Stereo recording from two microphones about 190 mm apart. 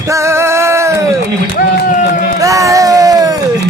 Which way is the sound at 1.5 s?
45° left (ahead or behind).